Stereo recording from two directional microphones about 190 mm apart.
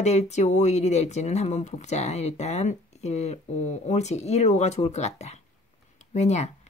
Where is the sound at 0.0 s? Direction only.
35° left (ahead or behind).